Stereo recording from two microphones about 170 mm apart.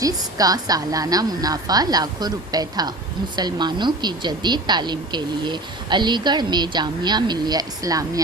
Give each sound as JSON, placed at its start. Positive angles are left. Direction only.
{"t": 0.0, "sound": "speech", "side_deg": -20}